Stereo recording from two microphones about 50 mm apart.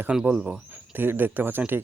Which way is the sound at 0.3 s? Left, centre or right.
Right.